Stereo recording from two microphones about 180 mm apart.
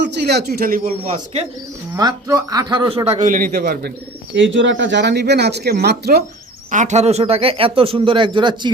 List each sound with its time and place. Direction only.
0.0 s a man's voice: 65° right (ahead or behind); by 1.5 s 40° right (ahead or behind)
1.9 s speech: 20° right (ahead or behind)
3.2 s a man's voice: 45° right (ahead or behind)
4.4 s speech: 90° right; by 6.2 s 65° right (ahead or behind)
6.7 s speech: 40° right (ahead or behind); by 8.7 s 25° right (ahead or behind)